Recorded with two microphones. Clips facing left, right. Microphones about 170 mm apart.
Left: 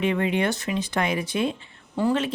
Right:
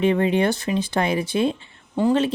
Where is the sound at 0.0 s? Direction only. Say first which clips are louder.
Right 4 dB; 35° right (ahead or behind).